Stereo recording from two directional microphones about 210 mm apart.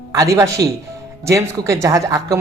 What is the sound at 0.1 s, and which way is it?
Speech, 15° right (ahead or behind).